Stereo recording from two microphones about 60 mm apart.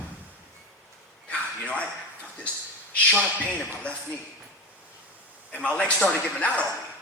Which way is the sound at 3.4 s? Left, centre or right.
Left.